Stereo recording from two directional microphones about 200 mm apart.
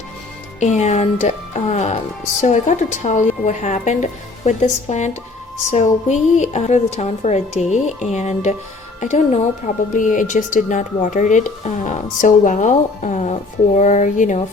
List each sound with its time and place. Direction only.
0.6 s speech: 35° left (ahead or behind)